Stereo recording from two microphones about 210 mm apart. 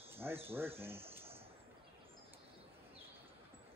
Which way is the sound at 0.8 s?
10° right (ahead or behind).